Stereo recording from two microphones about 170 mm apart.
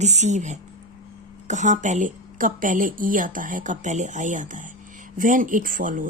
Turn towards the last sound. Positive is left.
turn(degrees=-50)  # may be behind; listen again after turning